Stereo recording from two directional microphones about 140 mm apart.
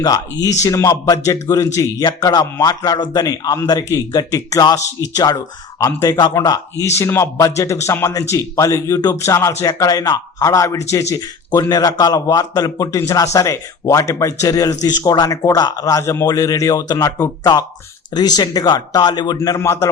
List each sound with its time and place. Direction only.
0.6 s a man's voice: 20° left (ahead or behind)
19.4 s a man's voice: 20° left (ahead or behind)